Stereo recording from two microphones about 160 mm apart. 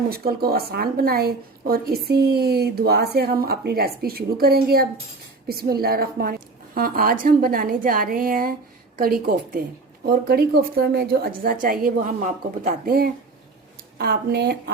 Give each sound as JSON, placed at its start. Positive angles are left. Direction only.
{"t": 0.1, "sound": "a woman's voice", "side_deg": -70}
{"t": 10.1, "sound": "a woman's voice", "side_deg": -80}
{"t": 14.0, "sound": "speech", "side_deg": -85}